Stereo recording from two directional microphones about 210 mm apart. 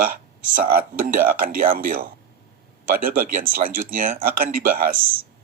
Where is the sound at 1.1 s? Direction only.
40° right (ahead or behind).